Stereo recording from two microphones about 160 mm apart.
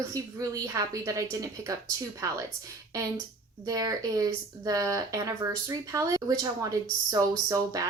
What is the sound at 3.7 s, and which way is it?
Speech, 25° right (ahead or behind).